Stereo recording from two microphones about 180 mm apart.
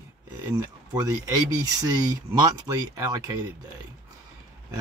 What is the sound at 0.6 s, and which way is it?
Speech, 20° right (ahead or behind).